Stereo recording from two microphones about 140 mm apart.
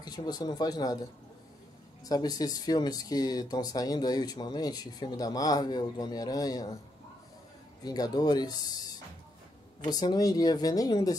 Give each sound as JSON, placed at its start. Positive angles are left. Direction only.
{"t": 0.0, "sound": "speech", "side_deg": 30}
{"t": 2.0, "sound": "speech", "side_deg": 25}
{"t": 7.8, "sound": "speech", "side_deg": 30}